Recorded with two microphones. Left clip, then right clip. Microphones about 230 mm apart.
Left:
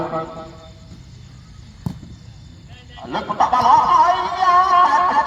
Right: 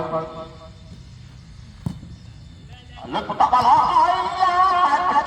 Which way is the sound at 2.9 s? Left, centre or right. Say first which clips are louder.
Left 2 dB; centre.